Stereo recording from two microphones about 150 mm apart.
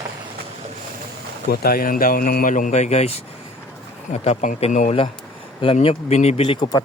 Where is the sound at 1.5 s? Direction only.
85° left.